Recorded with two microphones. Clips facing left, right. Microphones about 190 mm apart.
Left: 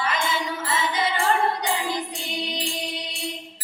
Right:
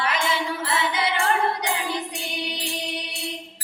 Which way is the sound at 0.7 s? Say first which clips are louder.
Left 1 dB; 70° right (ahead or behind).